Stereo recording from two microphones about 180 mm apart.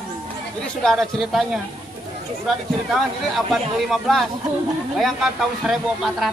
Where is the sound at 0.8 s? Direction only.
Centre (ahead or behind).